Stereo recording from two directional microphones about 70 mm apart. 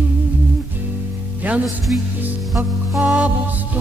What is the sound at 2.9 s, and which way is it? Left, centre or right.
Music, centre.